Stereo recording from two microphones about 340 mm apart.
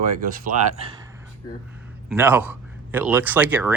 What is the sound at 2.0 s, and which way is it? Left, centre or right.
Speech, centre.